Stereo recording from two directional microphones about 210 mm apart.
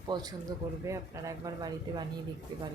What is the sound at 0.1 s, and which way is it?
A woman's voice, 20° right (ahead or behind).